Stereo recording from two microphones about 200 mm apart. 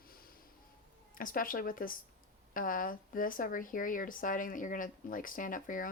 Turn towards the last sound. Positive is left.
turn(degrees=40)  # may be behind; listen again after turning